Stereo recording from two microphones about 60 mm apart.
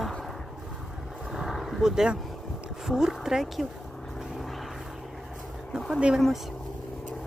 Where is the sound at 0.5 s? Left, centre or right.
Centre.